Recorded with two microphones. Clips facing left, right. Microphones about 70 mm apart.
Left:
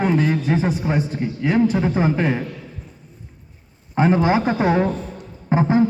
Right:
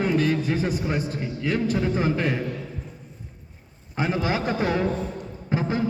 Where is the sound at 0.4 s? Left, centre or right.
Left.